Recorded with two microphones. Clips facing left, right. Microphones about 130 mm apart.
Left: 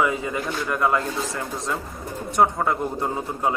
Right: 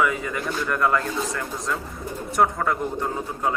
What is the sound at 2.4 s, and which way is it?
Speech, 20° left (ahead or behind).